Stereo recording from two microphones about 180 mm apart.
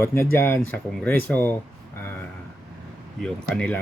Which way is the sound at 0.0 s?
15° left (ahead or behind).